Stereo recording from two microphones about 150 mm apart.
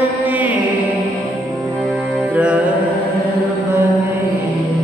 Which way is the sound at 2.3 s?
10° right (ahead or behind).